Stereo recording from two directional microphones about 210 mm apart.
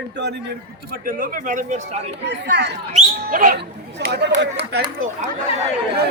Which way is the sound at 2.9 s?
40° right (ahead or behind).